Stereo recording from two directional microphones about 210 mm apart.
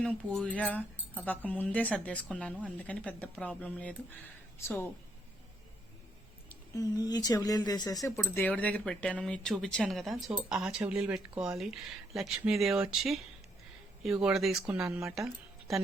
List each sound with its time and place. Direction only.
0.3 s speech: 5° left (ahead or behind)
6.5 s speech: 15° left (ahead or behind); by 15.8 s centre (ahead or behind)